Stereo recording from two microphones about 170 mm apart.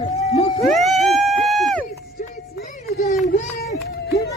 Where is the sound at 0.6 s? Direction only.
Centre (ahead or behind).